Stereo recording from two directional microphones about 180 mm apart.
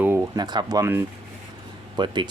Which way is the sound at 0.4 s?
20° right (ahead or behind).